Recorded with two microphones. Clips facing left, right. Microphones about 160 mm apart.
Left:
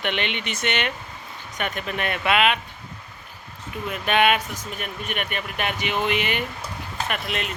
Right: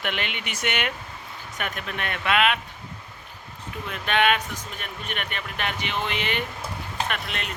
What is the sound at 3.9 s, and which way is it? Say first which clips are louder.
Speech: left 2 dB; 10° left (ahead or behind).